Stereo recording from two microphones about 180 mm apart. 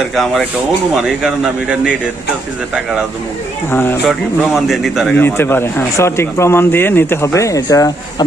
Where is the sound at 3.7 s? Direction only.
10° left (ahead or behind).